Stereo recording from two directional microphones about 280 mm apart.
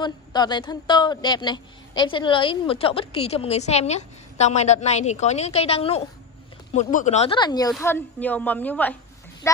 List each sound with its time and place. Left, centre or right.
0.0 s a woman's voice: centre